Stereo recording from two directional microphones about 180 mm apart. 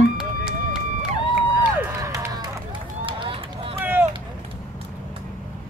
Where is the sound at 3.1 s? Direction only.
30° right (ahead or behind).